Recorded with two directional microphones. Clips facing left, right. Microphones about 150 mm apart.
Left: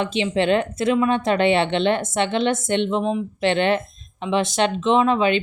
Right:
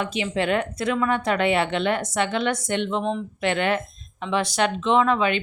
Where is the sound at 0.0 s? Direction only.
25° left (ahead or behind).